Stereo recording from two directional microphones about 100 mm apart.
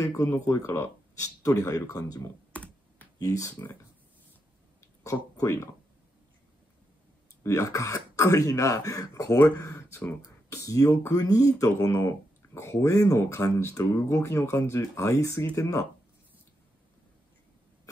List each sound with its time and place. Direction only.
0.0 s speech: 35° left (ahead or behind)
2.5 s computer keyboard: 15° left (ahead or behind)
3.2 s speech: 35° left (ahead or behind)
5.0 s speech: 35° left (ahead or behind)
7.4 s speech: 30° left (ahead or behind)